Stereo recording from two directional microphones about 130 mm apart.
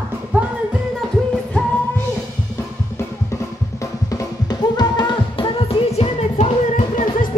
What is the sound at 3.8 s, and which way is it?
Music, 25° left (ahead or behind).